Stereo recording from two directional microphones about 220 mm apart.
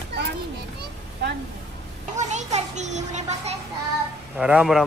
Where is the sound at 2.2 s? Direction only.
30° right (ahead or behind).